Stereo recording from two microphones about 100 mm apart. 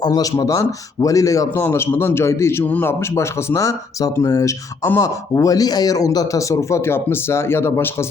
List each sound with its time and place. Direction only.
0.0 s a man's voice: 35° left (ahead or behind); by 2.9 s 20° left (ahead or behind)
3.2 s speech: 35° left (ahead or behind)